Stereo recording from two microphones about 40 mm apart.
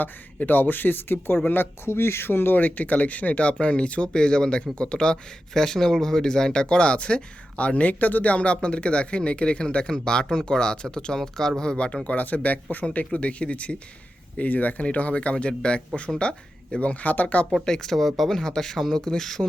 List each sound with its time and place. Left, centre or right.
0.0 s speech: left
12.0 s speech: left
14.3 s speech: left
17.5 s speech: centre
18.3 s speech: centre